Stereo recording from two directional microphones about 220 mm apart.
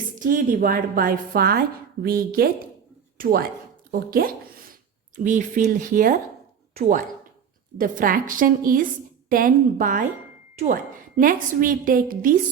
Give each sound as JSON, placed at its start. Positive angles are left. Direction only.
{"t": 0.2, "sound": "speech", "side_deg": -40}
{"t": 11.2, "sound": "speech", "side_deg": -40}